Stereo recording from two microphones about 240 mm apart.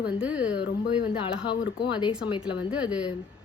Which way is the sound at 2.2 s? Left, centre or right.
Left.